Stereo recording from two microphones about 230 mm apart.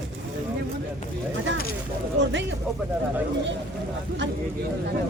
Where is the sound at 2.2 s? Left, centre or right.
Right.